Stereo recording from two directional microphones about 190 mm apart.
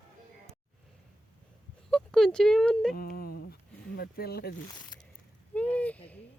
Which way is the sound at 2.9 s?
50° left (ahead or behind).